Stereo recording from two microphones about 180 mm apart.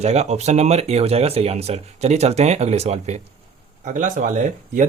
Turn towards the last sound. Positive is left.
turn(degrees=-45)  # may be behind; listen again after turning